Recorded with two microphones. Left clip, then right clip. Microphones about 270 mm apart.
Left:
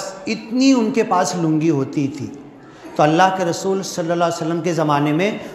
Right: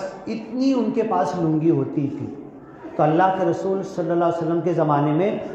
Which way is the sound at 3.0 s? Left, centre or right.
Left.